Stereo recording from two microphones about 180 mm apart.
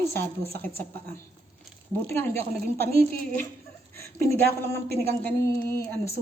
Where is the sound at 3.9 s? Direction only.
15° left (ahead or behind).